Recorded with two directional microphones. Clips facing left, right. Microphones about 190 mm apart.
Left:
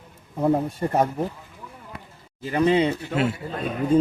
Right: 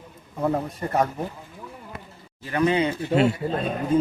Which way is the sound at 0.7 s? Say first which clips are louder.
Left 2 dB; 30° left (ahead or behind).